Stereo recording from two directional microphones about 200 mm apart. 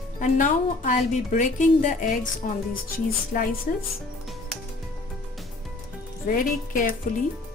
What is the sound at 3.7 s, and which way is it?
Speech, 45° left (ahead or behind).